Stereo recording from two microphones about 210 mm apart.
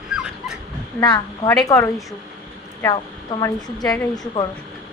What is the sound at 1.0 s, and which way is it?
A woman's voice, 20° left (ahead or behind).